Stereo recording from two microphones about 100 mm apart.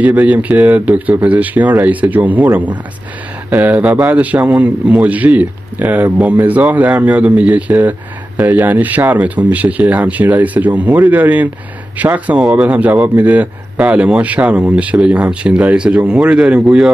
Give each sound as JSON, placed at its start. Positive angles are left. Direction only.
{"t": 0.0, "sound": "speech", "side_deg": -15}